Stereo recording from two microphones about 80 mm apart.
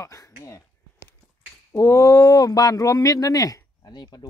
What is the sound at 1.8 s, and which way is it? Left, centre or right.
Speech, left.